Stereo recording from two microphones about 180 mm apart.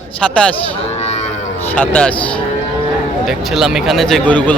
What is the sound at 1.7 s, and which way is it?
Speech, 5° left (ahead or behind).